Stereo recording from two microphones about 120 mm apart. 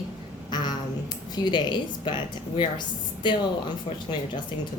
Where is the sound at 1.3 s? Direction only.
40° left (ahead or behind).